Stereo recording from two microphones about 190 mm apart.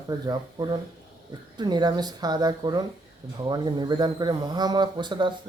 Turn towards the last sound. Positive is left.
turn(degrees=-25)  # may be behind; listen again after turning